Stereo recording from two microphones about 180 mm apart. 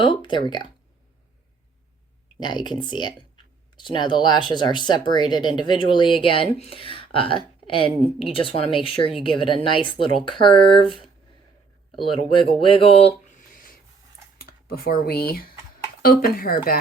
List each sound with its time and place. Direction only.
0.0 s speech: 25° left (ahead or behind)
2.8 s speech: 25° left (ahead or behind)
11.9 s speech: 30° left (ahead or behind)
13.5 s filing: 50° left (ahead or behind)
14.3 s speech: 55° left (ahead or behind)